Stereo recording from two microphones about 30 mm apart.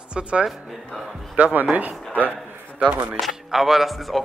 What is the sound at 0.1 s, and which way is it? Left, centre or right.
Speech, right.